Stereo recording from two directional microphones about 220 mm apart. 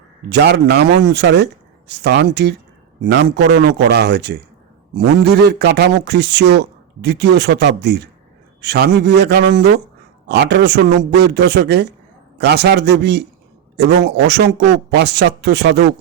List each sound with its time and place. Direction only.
0.3 s speech: 50° right (ahead or behind)